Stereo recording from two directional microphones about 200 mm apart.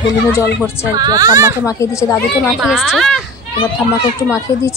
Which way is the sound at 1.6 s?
15° left (ahead or behind).